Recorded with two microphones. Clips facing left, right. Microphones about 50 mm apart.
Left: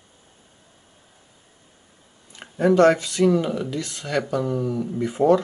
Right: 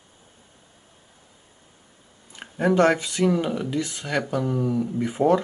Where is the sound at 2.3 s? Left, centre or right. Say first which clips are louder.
Left 3 dB; centre.